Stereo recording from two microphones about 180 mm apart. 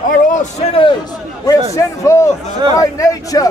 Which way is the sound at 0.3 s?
45° left (ahead or behind).